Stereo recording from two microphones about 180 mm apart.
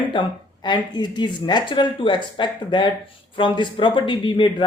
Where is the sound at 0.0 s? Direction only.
25° left (ahead or behind).